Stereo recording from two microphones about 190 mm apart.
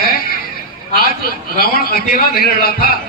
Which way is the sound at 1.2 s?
50° left (ahead or behind).